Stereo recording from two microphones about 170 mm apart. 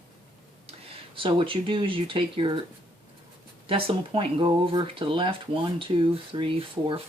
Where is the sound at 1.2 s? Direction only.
30° right (ahead or behind).